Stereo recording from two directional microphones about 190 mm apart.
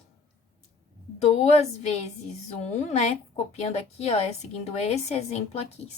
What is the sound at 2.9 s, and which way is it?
A woman's voice, 35° left (ahead or behind).